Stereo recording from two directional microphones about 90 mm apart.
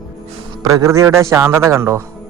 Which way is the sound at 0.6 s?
40° right (ahead or behind).